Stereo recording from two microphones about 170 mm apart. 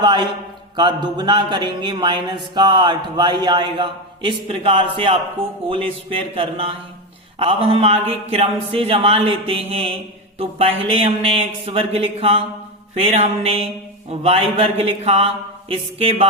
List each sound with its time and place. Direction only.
0.0 s a man's voice: 25° right (ahead or behind)